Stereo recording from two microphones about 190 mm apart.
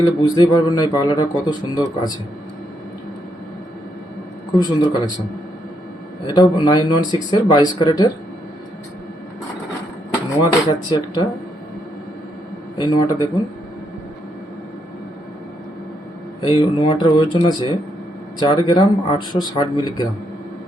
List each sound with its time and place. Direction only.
0.0 s speech: 20° left (ahead or behind)
4.5 s speech: 25° left (ahead or behind)
6.2 s speech: 20° left (ahead or behind)
10.3 s speech: 25° left (ahead or behind)
12.7 s speech: 20° left (ahead or behind)
16.5 s speech: 25° left (ahead or behind)